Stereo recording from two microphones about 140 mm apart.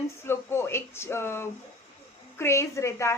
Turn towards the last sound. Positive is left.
turn(degrees=20)  # may be behind; listen again after turning